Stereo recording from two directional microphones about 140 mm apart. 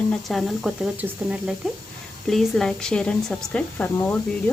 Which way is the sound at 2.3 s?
5° left (ahead or behind).